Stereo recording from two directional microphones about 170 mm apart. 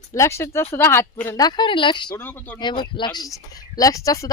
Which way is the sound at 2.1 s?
10° left (ahead or behind).